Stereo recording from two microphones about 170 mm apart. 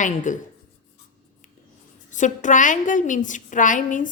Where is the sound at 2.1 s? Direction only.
45° left (ahead or behind).